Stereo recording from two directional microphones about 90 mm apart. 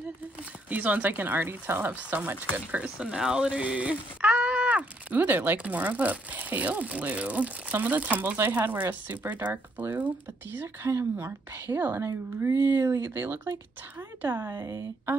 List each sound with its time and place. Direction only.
0.7 s speech: 15° right (ahead or behind)
10.9 s speech: 30° right (ahead or behind)
14.6 s a woman's voice: 35° right (ahead or behind)